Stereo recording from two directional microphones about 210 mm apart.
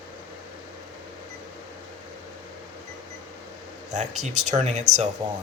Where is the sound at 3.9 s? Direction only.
35° right (ahead or behind).